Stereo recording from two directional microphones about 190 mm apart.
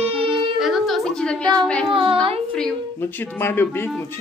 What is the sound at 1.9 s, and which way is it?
Speech, 25° right (ahead or behind).